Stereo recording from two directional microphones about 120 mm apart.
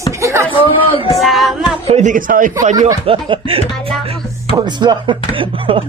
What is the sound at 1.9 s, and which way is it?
Speech, 80° right.